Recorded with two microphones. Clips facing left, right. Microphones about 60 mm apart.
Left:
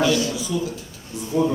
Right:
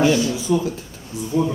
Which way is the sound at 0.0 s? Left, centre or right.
Right.